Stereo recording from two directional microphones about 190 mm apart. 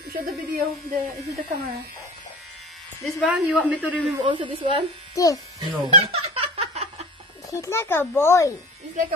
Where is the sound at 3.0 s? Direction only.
5° right (ahead or behind).